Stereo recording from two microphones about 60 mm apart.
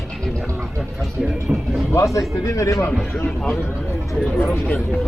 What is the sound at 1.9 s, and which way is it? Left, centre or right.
Speech, left.